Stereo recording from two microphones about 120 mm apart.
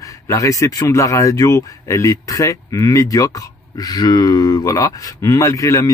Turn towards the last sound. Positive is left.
turn(degrees=25)  # may be behind; listen again after turning